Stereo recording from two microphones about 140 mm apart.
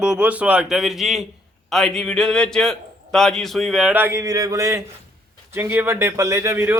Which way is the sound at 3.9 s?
15° right (ahead or behind).